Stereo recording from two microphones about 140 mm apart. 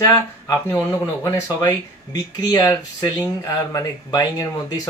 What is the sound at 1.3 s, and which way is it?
Speech, 30° left (ahead or behind).